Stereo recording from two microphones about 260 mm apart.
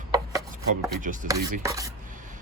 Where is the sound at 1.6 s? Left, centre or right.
Centre.